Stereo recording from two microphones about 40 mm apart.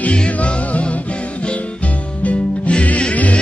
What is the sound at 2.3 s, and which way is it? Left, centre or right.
Music, left.